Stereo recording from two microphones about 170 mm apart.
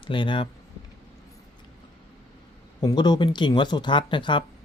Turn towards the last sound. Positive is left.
turn(degrees=30)  # may be behind; listen again after turning